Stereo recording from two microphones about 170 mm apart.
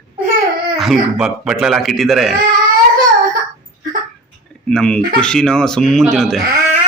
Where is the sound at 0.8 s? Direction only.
Centre (ahead or behind).